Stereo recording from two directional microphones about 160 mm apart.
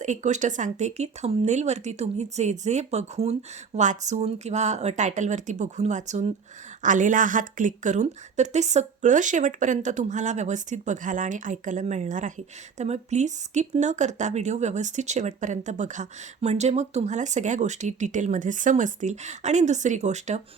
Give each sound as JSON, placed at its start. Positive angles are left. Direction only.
{"t": 0.0, "sound": "speech", "side_deg": -50}